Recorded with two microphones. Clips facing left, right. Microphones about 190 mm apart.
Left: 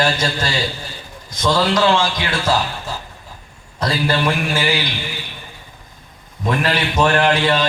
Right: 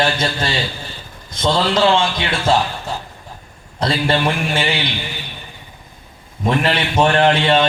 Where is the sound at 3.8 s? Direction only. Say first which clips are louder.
Right 1 dB; 25° right (ahead or behind).